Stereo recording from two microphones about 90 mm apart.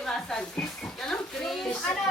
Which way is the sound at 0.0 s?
5° left (ahead or behind).